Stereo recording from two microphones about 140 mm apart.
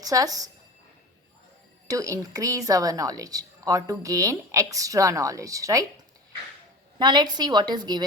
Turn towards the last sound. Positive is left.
turn(degrees=-30)  # may be behind; listen again after turning